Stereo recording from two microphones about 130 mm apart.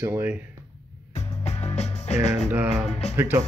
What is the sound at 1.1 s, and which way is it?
Music, 60° left (ahead or behind).